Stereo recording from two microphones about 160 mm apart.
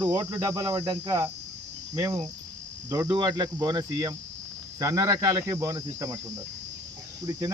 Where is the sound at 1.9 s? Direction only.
20° right (ahead or behind).